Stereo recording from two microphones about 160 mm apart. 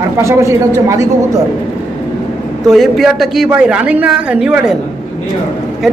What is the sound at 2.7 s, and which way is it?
A man's voice, centre (ahead or behind).